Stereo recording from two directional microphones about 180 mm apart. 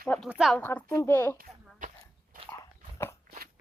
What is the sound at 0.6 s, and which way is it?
Speech, 10° left (ahead or behind).